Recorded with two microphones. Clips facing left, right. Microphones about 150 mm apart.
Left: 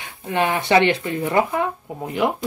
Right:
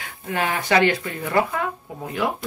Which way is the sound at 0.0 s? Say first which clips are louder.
Left 4 dB; 25° left (ahead or behind).